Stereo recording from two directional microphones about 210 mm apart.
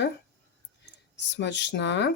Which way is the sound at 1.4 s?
55° left (ahead or behind).